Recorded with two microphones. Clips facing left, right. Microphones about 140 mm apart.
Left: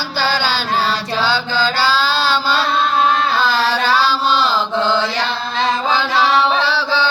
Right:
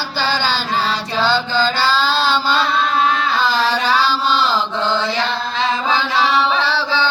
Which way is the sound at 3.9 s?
5° left (ahead or behind).